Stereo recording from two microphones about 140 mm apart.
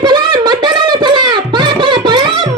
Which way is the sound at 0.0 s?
30° right (ahead or behind).